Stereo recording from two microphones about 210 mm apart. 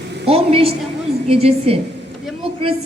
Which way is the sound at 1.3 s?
30° right (ahead or behind).